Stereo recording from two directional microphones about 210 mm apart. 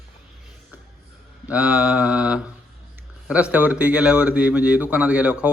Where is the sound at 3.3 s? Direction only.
5° right (ahead or behind).